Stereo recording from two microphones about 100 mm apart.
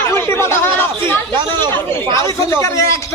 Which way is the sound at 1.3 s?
50° right (ahead or behind).